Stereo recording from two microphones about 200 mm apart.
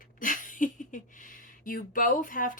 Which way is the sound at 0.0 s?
40° left (ahead or behind).